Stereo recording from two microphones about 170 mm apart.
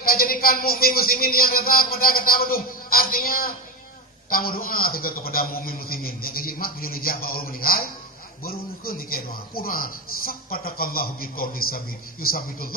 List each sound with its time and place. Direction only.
0.0 s a man's voice: 60° left (ahead or behind)